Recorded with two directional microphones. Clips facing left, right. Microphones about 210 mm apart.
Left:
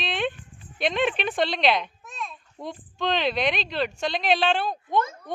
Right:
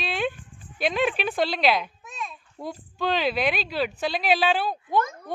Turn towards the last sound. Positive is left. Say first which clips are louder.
# even
turn(degrees=-5)  # may be behind; listen again after turning